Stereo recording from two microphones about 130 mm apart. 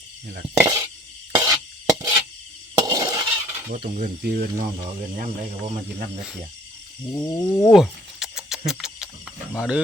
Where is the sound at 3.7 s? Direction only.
90° right.